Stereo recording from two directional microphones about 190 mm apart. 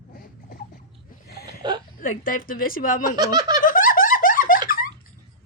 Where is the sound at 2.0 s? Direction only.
45° left (ahead or behind).